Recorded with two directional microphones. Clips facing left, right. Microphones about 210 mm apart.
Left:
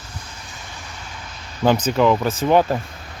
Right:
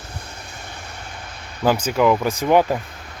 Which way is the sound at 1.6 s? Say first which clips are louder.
Left 1 dB; 10° right (ahead or behind).